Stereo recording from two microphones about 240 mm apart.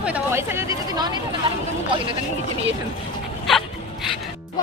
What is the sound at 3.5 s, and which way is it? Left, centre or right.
Dog, centre.